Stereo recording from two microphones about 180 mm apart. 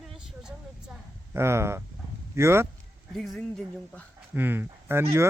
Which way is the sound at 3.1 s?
Centre (ahead or behind).